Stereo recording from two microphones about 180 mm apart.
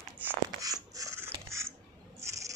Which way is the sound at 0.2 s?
20° right (ahead or behind).